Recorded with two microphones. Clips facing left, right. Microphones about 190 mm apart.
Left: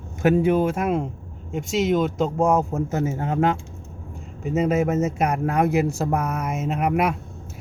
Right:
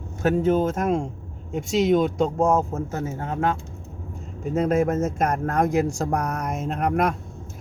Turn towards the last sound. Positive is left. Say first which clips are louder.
# left 1 dB
turn(degrees=5)  # may be behind; listen again after turning